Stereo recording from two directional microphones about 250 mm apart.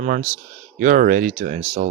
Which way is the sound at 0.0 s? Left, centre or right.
Right.